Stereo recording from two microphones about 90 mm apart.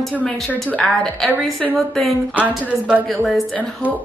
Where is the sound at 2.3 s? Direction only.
15° right (ahead or behind).